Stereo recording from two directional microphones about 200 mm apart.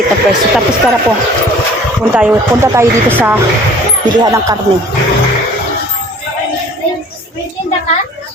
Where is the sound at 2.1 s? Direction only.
10° right (ahead or behind).